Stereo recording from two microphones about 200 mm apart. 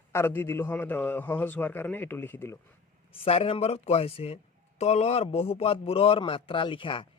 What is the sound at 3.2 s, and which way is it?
Speech, 30° left (ahead or behind).